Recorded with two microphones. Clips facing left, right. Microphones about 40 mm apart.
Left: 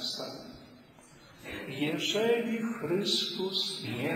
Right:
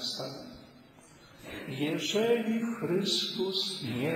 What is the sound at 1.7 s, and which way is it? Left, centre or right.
A man's voice, centre.